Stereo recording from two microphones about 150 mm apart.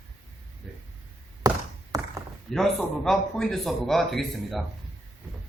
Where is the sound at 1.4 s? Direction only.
25° right (ahead or behind).